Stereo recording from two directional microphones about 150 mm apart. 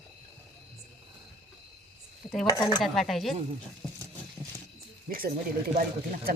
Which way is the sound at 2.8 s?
Centre (ahead or behind).